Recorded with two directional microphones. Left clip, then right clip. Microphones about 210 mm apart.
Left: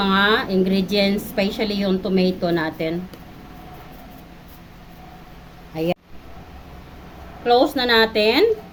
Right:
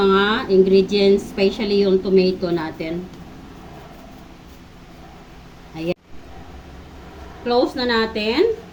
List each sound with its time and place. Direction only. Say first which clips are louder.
0.0 s a woman's voice: right 1 dB; 55° left (ahead or behind)
7.4 s a woman's voice: left 2 dB; 50° left (ahead or behind)